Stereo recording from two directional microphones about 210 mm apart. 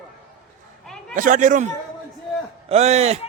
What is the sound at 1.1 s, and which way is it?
A man's voice, 40° right (ahead or behind).